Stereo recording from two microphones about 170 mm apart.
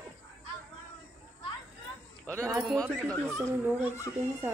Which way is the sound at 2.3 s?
15° right (ahead or behind).